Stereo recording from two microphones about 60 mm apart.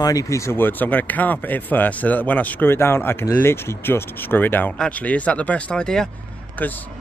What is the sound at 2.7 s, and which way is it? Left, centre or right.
Speech, left.